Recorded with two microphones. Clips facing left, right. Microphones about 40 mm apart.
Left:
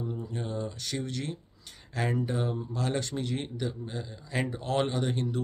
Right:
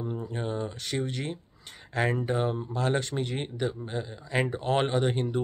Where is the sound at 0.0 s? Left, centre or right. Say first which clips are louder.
Right 2 dB; right.